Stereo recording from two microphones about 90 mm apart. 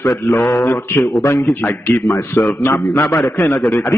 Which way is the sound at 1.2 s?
35° left (ahead or behind).